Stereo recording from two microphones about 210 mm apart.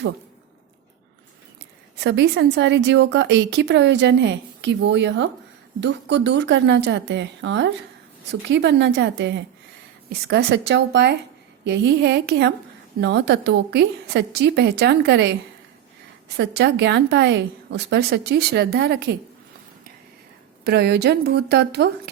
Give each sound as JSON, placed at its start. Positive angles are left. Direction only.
{"t": 2.0, "sound": "a woman's voice", "side_deg": -55}
{"t": 16.4, "sound": "a woman's voice", "side_deg": -55}
{"t": 20.7, "sound": "a woman's voice", "side_deg": -50}